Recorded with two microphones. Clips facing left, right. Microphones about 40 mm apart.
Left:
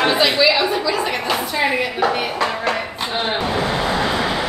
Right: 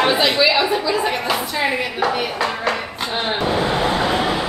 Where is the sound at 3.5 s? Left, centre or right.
Right.